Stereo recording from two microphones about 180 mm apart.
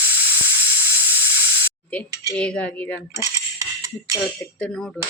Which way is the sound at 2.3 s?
5° left (ahead or behind).